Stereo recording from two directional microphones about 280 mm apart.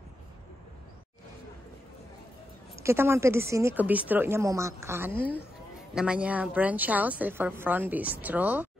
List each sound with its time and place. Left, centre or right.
2.7 s a woman's voice: centre